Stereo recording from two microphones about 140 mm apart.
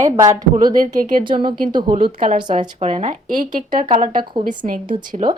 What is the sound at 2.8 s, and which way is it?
Speech, 50° right (ahead or behind).